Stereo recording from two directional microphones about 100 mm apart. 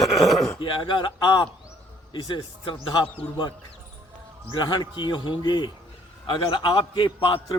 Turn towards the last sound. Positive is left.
turn(degrees=50)  # may be behind; listen again after turning